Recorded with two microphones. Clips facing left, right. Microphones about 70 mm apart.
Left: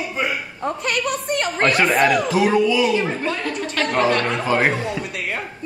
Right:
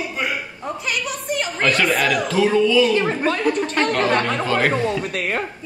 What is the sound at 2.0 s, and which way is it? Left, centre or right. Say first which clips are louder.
Speech: left 3 dB; left.